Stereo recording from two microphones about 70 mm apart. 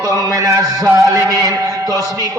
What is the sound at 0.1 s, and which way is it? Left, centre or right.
Mantra, right.